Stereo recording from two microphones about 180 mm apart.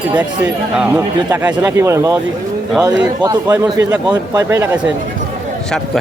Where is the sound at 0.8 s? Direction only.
10° right (ahead or behind).